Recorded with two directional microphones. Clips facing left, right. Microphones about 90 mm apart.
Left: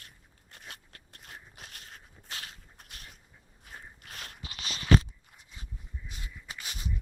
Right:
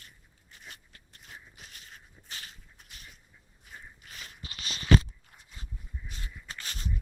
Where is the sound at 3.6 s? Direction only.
60° left (ahead or behind).